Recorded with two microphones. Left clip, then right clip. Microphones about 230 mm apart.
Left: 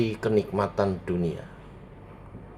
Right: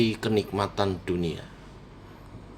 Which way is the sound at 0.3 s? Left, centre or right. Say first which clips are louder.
Left 3 dB; right.